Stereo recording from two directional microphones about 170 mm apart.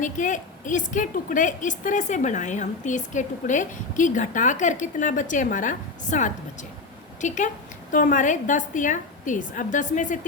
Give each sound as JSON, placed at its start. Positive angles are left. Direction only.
{"t": 0.0, "sound": "a woman's voice", "side_deg": 50}